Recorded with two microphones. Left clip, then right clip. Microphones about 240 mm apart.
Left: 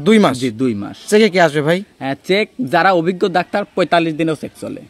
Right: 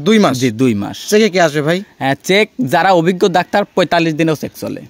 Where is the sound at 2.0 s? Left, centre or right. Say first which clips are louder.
Right 4 dB; right.